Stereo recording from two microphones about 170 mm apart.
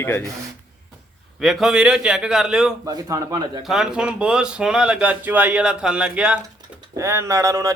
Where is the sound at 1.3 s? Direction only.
Centre (ahead or behind).